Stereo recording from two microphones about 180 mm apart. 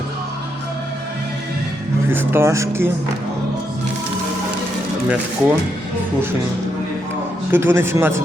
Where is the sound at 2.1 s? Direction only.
10° right (ahead or behind).